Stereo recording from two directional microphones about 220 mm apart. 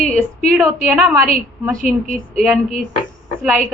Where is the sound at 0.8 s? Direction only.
10° right (ahead or behind).